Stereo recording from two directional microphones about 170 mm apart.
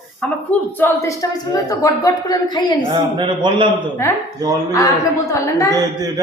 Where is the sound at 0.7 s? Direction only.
15° left (ahead or behind).